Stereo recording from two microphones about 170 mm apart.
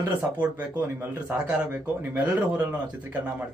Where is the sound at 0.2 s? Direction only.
10° right (ahead or behind).